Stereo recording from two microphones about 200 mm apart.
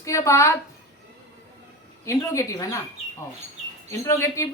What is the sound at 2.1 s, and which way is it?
Speech, 15° left (ahead or behind).